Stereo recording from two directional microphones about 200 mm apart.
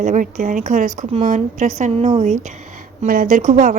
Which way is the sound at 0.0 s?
40° right (ahead or behind).